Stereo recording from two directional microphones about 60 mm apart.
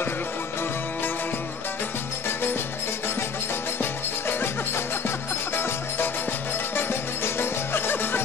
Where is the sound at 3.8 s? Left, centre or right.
Left.